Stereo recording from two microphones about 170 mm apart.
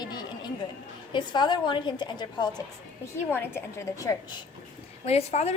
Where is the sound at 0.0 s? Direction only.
25° left (ahead or behind).